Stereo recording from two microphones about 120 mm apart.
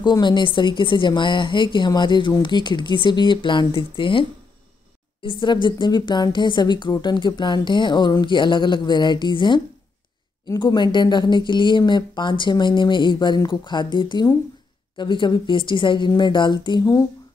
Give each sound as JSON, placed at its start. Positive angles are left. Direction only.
{"t": 0.0, "sound": "a woman's voice", "side_deg": 40}